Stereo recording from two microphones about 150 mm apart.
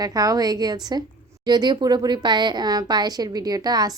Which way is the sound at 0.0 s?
25° right (ahead or behind).